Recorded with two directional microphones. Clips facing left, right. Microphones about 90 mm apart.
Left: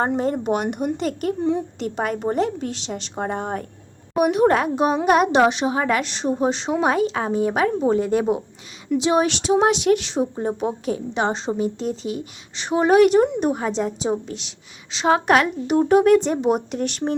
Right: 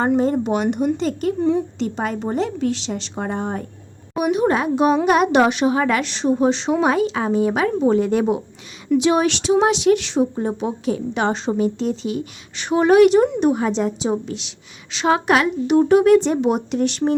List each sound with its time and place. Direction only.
0.2 s a woman's voice: 50° left (ahead or behind)
1.4 s a woman's voice: 15° left (ahead or behind)
1.8 s a woman's voice: 55° left (ahead or behind)
4.2 s a woman's voice: 60° left (ahead or behind)
4.7 s a woman's voice: 40° left (ahead or behind)
5.3 s a woman's voice: 25° left (ahead or behind); by 17.0 s 45° left (ahead or behind)